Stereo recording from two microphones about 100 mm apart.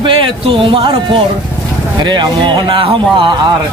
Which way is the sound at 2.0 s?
50° right (ahead or behind).